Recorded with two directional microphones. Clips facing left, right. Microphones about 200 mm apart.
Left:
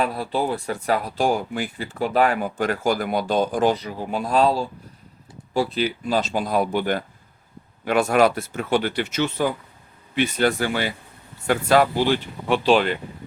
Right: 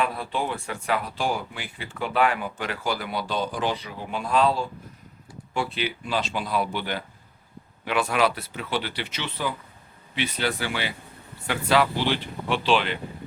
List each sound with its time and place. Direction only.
0.0 s speech: 40° left (ahead or behind)